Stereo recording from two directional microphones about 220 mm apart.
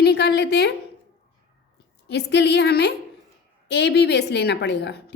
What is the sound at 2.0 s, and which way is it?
A woman's voice, 50° left (ahead or behind).